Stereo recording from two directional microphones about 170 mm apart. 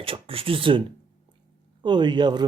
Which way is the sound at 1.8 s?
25° right (ahead or behind).